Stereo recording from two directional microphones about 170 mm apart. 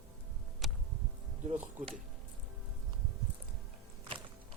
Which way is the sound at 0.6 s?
Centre (ahead or behind).